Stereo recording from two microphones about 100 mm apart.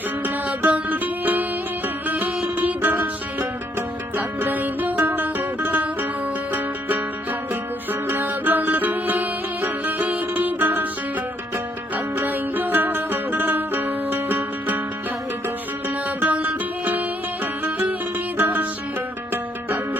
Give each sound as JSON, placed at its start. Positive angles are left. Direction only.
{"t": 0.2, "sound": "music", "side_deg": -15}
{"t": 8.0, "sound": "music", "side_deg": -20}
{"t": 16.0, "sound": "music", "side_deg": -15}